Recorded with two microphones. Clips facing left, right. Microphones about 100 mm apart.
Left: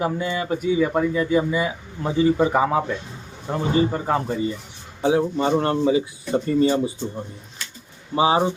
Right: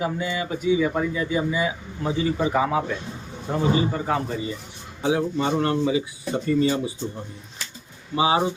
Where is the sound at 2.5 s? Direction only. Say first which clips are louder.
Left 2 dB; 40° left (ahead or behind).